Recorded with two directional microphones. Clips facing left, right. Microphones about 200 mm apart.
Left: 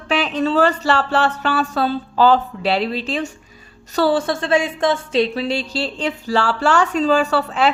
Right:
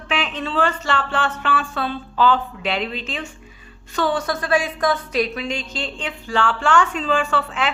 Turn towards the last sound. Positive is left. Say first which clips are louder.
# left 5 dB
turn(degrees=40)  # may be behind; listen again after turning